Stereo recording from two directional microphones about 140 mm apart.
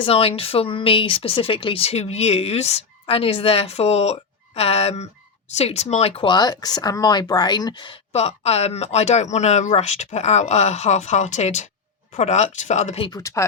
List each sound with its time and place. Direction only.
0.0 s speech: 45° left (ahead or behind)
8.1 s speech: 50° left (ahead or behind)
13.1 s speech: 25° left (ahead or behind)